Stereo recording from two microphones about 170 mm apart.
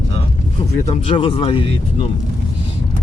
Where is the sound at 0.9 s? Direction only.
30° left (ahead or behind).